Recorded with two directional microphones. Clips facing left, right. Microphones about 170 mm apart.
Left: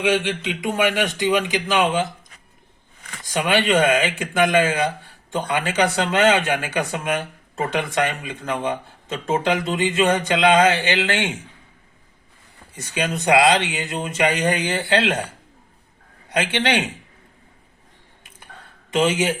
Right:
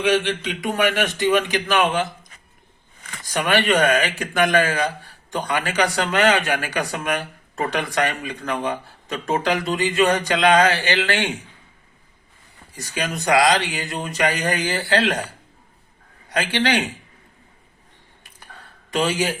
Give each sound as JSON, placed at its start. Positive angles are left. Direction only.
{"t": 0.0, "sound": "a man's voice", "side_deg": 20}
{"t": 3.2, "sound": "a man's voice", "side_deg": 20}
{"t": 12.7, "sound": "a man's voice", "side_deg": 25}
{"t": 16.3, "sound": "a man's voice", "side_deg": 25}
{"t": 18.9, "sound": "speech", "side_deg": 20}